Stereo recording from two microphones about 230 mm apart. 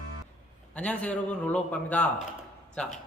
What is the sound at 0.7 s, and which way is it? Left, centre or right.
A man's voice, centre.